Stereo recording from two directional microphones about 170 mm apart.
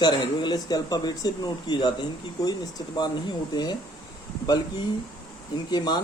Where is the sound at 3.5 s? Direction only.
25° left (ahead or behind).